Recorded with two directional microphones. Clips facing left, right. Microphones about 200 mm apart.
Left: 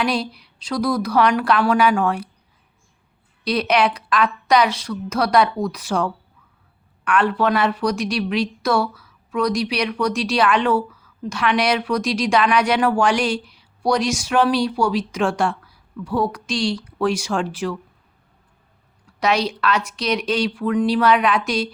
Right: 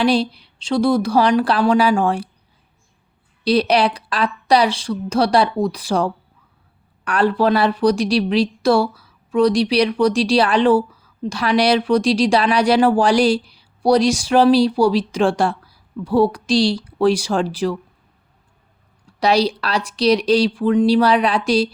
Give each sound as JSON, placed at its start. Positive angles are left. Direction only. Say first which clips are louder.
{"t": 0.0, "sound": "a woman's voice", "louder": "right 5 dB", "side_deg": -30}
{"t": 3.4, "sound": "a woman's voice", "louder": "right 3 dB", "side_deg": -30}
{"t": 19.2, "sound": "a woman's voice", "louder": "right 3 dB", "side_deg": -35}